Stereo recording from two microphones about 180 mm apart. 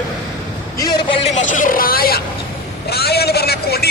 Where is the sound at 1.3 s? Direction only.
45° left (ahead or behind).